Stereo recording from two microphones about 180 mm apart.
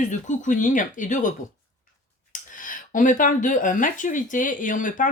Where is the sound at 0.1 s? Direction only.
45° left (ahead or behind).